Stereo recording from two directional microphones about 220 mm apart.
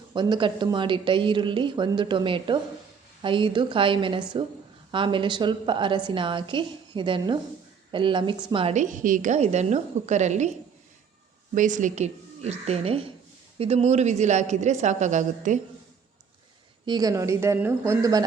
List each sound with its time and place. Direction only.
0.1 s a woman's voice: 20° right (ahead or behind)
11.5 s a woman's voice: 35° right (ahead or behind)
16.8 s a woman's voice: 20° right (ahead or behind)